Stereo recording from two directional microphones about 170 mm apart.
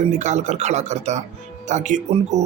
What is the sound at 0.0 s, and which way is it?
Speech, 45° right (ahead or behind).